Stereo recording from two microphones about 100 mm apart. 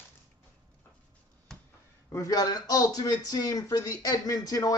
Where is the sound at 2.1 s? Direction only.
40° left (ahead or behind).